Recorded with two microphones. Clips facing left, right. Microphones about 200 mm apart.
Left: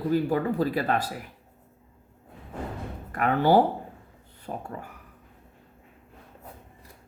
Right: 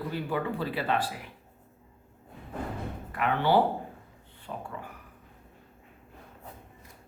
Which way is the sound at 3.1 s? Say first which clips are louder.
Left 4 dB; 45° left (ahead or behind).